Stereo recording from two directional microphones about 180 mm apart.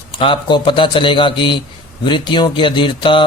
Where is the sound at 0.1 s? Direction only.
30° left (ahead or behind).